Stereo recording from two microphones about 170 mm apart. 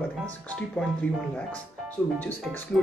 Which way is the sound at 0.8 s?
5° left (ahead or behind).